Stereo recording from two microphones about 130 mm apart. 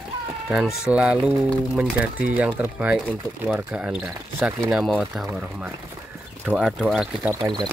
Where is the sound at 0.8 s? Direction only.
10° right (ahead or behind).